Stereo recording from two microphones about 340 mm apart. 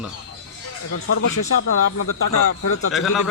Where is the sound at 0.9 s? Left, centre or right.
Left.